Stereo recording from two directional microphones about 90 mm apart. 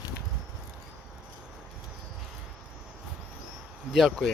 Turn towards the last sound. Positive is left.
turn(degrees=0)  # may be behind; listen again after turning